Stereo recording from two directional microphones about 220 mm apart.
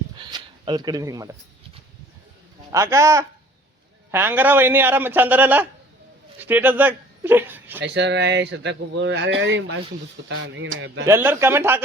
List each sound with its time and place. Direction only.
0.2 s a sound: 20° right (ahead or behind)
2.7 s a man's voice: 15° right (ahead or behind)
7.8 s speech: 50° right (ahead or behind)
11.0 s a man's voice: 10° right (ahead or behind)